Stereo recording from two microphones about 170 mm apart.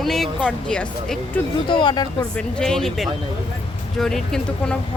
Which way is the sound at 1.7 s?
30° left (ahead or behind).